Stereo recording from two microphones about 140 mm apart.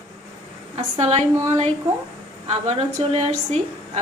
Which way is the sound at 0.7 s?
45° right (ahead or behind).